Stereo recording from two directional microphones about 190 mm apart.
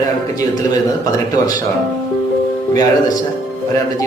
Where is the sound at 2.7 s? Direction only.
20° left (ahead or behind).